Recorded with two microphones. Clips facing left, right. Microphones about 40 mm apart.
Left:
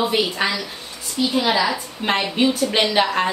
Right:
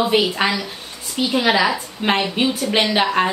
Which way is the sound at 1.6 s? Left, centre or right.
Centre.